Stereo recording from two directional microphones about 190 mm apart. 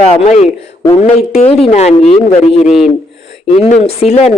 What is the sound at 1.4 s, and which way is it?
Speech, 35° left (ahead or behind).